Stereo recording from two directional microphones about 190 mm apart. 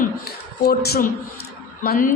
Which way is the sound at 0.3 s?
55° left (ahead or behind).